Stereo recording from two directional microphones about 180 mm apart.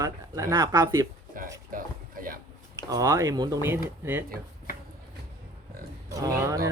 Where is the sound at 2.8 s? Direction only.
20° right (ahead or behind).